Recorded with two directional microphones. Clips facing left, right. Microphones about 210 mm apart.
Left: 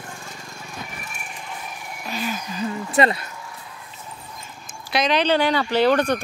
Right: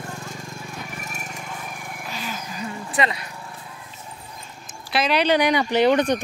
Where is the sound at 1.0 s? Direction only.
40° right (ahead or behind).